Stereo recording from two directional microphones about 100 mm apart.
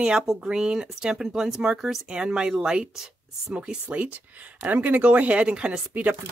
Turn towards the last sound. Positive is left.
turn(degrees=-15)  # may be behind; listen again after turning